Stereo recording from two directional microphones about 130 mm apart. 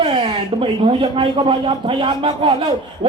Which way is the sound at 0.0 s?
40° right (ahead or behind).